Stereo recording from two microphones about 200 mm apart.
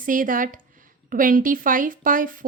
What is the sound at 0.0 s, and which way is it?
A woman's voice, 40° right (ahead or behind).